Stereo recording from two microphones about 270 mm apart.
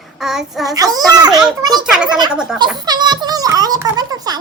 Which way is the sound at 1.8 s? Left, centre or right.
Centre.